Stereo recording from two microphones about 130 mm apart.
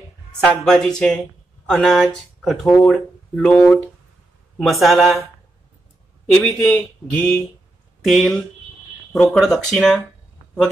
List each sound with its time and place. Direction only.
0.4 s speech: 5° left (ahead or behind)
4.6 s speech: centre (ahead or behind)
6.4 s speech: 10° left (ahead or behind)
8.0 s speech: centre (ahead or behind)